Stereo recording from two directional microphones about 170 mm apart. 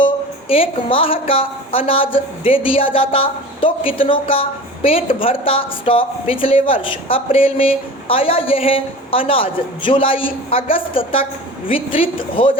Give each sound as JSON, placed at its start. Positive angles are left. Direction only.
{"t": 0.0, "sound": "a woman's voice", "side_deg": 35}